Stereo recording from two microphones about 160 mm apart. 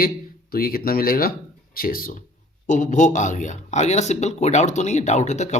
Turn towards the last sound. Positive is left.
turn(degrees=45)  # may be behind; listen again after turning